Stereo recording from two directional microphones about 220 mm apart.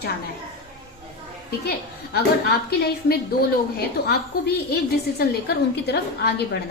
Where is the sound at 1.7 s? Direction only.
45° left (ahead or behind).